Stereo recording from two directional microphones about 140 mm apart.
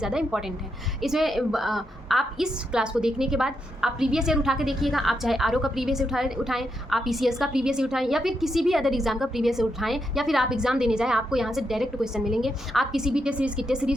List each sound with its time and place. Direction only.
0.0 s a woman's voice: 5° right (ahead or behind)